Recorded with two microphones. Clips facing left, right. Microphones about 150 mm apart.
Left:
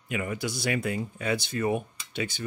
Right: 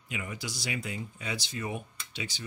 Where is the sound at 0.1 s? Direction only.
55° left (ahead or behind).